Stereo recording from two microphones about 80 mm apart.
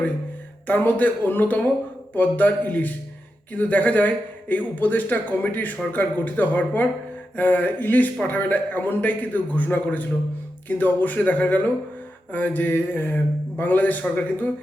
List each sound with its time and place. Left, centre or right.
0.7 s a man's voice: left